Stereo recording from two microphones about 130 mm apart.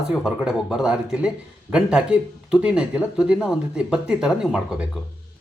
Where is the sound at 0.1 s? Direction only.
5° right (ahead or behind).